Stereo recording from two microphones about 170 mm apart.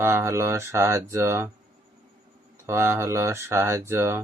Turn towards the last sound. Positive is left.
turn(degrees=-15)  # may be behind; listen again after turning